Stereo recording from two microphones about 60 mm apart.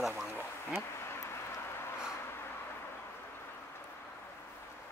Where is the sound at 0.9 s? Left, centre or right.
Left.